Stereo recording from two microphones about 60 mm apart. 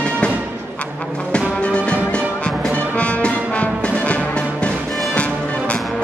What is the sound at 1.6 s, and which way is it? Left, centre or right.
Music, centre.